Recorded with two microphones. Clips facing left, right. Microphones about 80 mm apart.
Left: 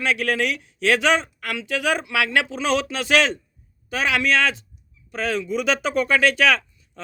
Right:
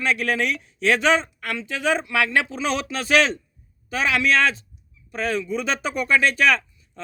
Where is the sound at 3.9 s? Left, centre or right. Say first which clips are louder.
Even; left.